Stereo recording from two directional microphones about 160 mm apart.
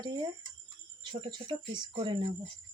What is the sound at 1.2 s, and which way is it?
Speech, 25° right (ahead or behind).